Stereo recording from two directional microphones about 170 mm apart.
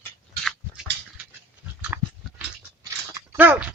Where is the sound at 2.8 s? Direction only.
15° right (ahead or behind).